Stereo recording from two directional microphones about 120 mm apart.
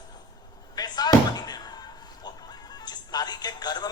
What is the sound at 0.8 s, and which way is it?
Slam, 35° left (ahead or behind).